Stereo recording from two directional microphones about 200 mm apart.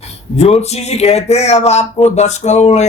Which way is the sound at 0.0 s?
30° left (ahead or behind).